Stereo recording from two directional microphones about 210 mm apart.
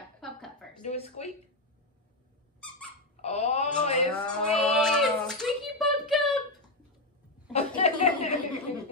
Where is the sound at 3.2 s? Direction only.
30° left (ahead or behind).